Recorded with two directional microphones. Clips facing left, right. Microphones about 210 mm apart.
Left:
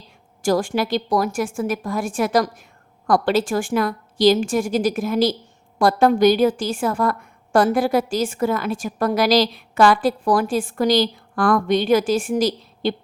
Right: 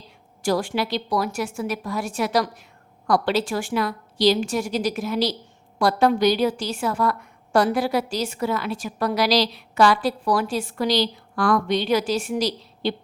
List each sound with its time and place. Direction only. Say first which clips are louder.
0.4 s a woman's voice: left 3 dB; 45° left (ahead or behind)